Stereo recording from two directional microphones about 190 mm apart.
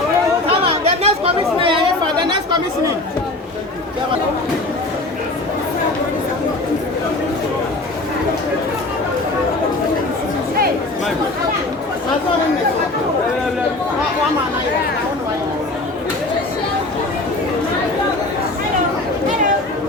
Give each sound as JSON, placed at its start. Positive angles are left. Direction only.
{"t": 0.4, "sound": "chatter", "side_deg": -30}